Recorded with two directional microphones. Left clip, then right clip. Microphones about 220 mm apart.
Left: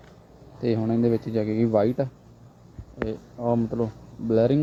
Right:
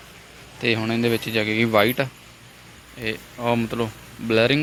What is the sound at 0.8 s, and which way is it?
Speech, 25° right (ahead or behind).